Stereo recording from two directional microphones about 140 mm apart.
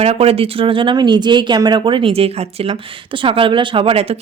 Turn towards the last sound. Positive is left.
turn(degrees=-45)  # may be behind; listen again after turning